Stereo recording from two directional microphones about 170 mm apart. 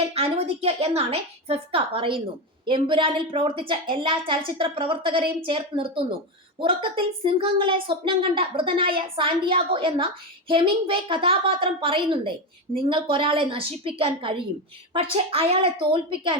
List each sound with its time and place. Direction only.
0.1 s a woman's voice: 35° right (ahead or behind)